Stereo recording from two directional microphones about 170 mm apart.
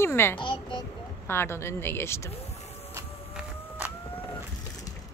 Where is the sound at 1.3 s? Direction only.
15° left (ahead or behind).